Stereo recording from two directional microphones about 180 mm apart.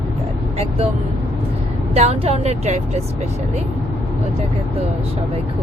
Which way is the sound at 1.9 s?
35° right (ahead or behind).